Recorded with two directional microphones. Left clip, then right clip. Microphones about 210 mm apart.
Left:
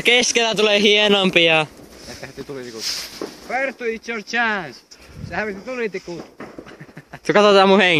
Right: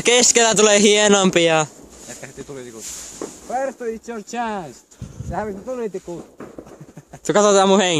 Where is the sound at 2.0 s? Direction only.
40° left (ahead or behind).